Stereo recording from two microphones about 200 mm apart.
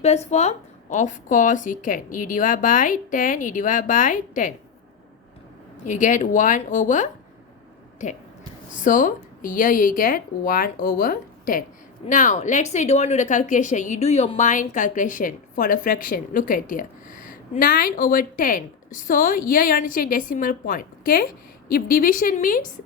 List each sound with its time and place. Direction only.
0.0 s speech: 35° left (ahead or behind)
5.8 s speech: 40° left (ahead or behind)